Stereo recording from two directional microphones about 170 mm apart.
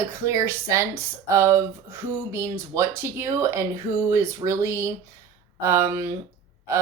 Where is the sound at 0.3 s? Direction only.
15° right (ahead or behind).